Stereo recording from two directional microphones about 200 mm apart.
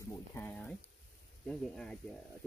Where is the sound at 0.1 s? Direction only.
10° left (ahead or behind).